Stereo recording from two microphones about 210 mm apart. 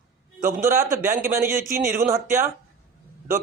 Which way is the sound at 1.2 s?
10° right (ahead or behind).